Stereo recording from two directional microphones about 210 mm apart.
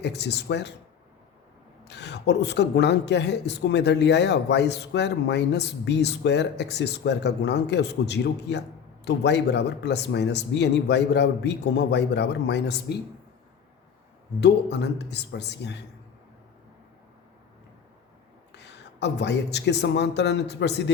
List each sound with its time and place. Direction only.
0.0 s speech: 55° left (ahead or behind)
1.8 s speech: 55° left (ahead or behind)
14.4 s speech: 55° left (ahead or behind)
18.5 s a man's voice: 55° left (ahead or behind)